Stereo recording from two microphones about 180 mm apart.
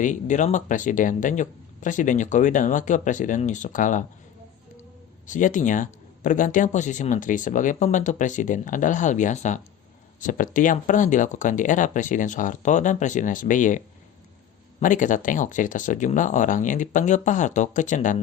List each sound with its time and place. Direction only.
0.0 s speech: 45° left (ahead or behind)
5.2 s speech: 45° left (ahead or behind)